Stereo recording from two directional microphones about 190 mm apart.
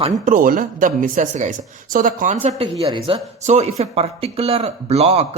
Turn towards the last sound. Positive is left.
turn(degrees=-35)  # may be behind; listen again after turning